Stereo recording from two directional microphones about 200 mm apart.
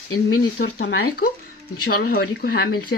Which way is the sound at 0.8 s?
75° left (ahead or behind).